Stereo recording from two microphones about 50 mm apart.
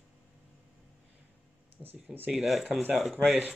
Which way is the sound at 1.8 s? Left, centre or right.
Centre.